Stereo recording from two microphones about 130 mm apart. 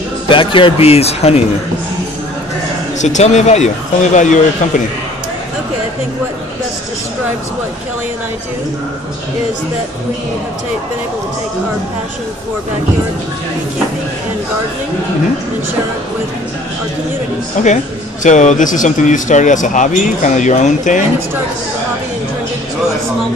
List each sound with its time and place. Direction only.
0.3 s speech: 40° left (ahead or behind)
3.0 s speech: 65° left (ahead or behind)
17.6 s speech: 70° left (ahead or behind)